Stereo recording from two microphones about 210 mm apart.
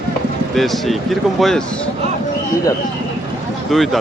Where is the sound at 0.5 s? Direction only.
Centre (ahead or behind).